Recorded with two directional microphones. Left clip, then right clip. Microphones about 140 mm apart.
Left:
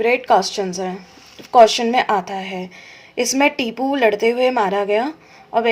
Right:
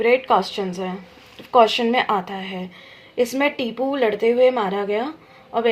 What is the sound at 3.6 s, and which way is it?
Speech, 55° left (ahead or behind).